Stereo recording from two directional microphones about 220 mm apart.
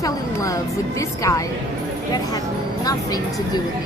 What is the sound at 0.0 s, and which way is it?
A woman's voice, 15° left (ahead or behind).